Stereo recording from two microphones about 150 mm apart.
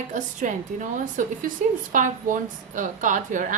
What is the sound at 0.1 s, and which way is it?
A woman's voice, 55° right (ahead or behind).